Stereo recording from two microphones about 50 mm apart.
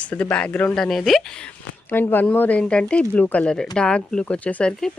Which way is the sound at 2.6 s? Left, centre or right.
Left.